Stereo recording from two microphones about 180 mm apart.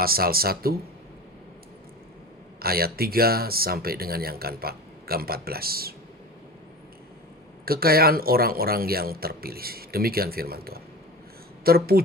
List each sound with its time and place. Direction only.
0.0 s speech: 55° right (ahead or behind)
2.6 s speech: 55° right (ahead or behind)
7.6 s speech: 55° right (ahead or behind)